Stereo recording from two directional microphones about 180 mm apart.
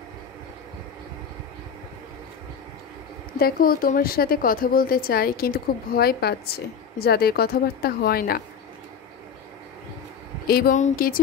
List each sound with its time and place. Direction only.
3.3 s a woman's voice: 60° left (ahead or behind)
10.4 s speech: 55° left (ahead or behind)